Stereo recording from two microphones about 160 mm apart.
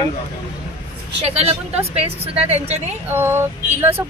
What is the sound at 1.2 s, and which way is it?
A woman's voice, 40° right (ahead or behind).